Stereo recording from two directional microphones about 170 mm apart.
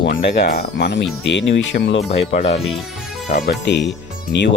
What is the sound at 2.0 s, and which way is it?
Speech, 40° left (ahead or behind).